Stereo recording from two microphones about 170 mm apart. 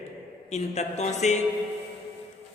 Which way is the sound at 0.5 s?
40° left (ahead or behind).